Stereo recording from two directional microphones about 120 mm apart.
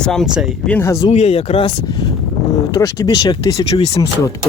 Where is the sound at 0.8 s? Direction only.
25° left (ahead or behind).